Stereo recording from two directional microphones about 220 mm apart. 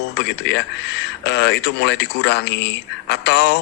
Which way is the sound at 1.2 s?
50° left (ahead or behind).